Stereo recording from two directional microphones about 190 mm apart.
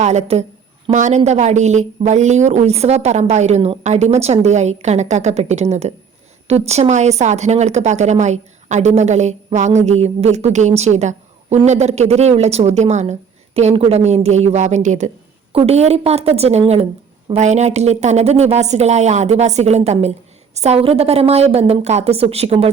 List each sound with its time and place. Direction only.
0.0 s a woman's voice: 35° right (ahead or behind)